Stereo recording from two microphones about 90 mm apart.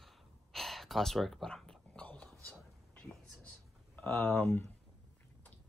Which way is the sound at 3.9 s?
20° left (ahead or behind).